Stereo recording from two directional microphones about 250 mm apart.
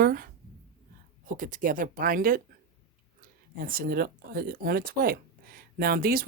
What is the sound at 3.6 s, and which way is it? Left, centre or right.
Speech, right.